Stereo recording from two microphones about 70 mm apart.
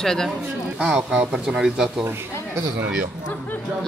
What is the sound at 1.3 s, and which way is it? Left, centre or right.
Speech, centre.